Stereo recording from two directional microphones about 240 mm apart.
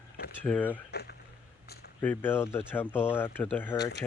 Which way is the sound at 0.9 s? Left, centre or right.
Left.